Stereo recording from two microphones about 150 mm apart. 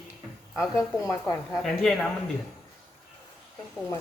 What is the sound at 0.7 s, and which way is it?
Speech, 20° left (ahead or behind).